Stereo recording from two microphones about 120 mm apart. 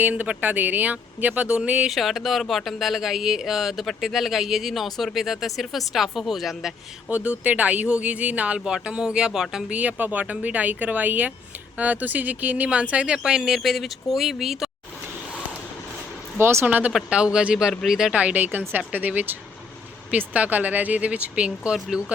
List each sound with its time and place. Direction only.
0.0 s speech: 15° right (ahead or behind)
7.1 s speech: 10° right (ahead or behind)
16.4 s speech: 20° right (ahead or behind)